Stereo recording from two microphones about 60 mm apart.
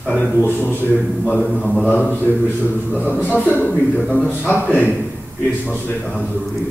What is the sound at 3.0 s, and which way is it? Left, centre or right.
Speech, left.